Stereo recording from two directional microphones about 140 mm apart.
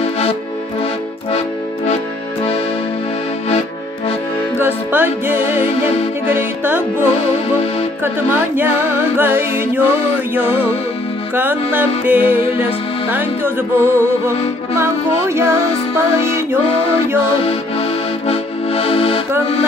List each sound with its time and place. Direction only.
0.0 s music: 45° left (ahead or behind)
4.6 s music: 15° right (ahead or behind)
17.5 s accordion: 45° left (ahead or behind)